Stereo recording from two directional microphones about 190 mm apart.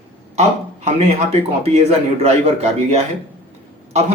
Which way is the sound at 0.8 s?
30° right (ahead or behind).